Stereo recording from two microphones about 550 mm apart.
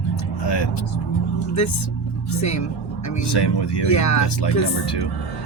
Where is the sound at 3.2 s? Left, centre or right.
Left.